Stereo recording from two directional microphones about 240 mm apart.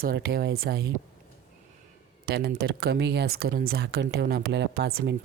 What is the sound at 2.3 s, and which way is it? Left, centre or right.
Speech, right.